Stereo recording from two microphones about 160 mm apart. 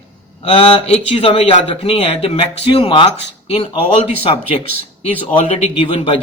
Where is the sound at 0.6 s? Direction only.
35° left (ahead or behind).